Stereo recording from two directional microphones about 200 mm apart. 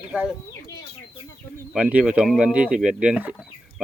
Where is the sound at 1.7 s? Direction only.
5° right (ahead or behind).